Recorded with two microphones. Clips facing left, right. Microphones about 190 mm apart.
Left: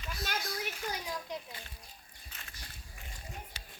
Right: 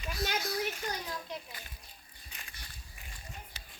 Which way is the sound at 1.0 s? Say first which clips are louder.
Left 1 dB; 10° left (ahead or behind).